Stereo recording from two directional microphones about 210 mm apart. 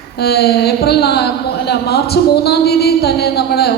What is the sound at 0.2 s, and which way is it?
A woman's voice, 50° left (ahead or behind).